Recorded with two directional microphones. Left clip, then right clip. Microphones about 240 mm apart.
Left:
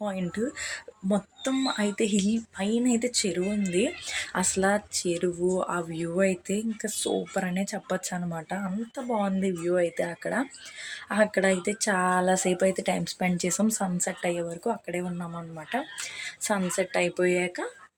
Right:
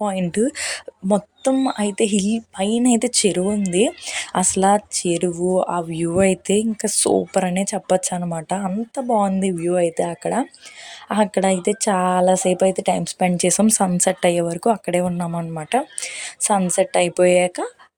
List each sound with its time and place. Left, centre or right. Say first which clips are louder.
0.0 s speech: right 10 dB; right